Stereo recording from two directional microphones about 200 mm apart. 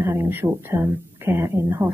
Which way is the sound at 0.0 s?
10° right (ahead or behind).